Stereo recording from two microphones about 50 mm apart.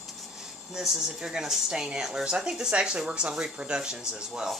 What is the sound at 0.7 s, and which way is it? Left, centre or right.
Speech, centre.